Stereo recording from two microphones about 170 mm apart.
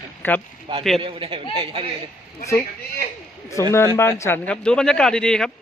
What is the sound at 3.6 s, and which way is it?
Speech, 15° left (ahead or behind).